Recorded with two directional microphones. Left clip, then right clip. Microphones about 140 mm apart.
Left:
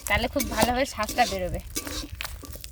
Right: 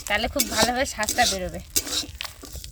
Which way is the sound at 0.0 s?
15° left (ahead or behind).